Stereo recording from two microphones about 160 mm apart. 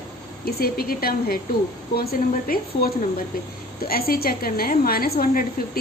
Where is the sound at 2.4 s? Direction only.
70° left (ahead or behind).